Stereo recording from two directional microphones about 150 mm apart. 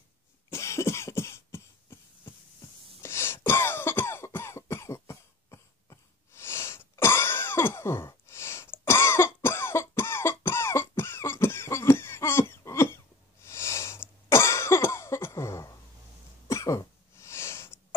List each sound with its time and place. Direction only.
0.5 s cough: 20° left (ahead or behind)
16.4 s sneeze: 20° left (ahead or behind)